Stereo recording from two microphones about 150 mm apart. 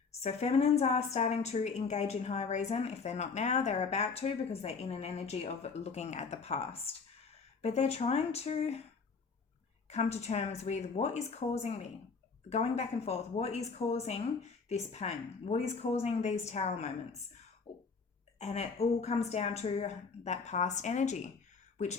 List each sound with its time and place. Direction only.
0.2 s a woman's voice: 45° left (ahead or behind)
9.9 s a woman's voice: 50° left (ahead or behind)
18.3 s a woman's voice: 50° left (ahead or behind)